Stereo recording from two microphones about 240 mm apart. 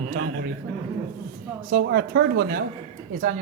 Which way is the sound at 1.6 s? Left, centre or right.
Right.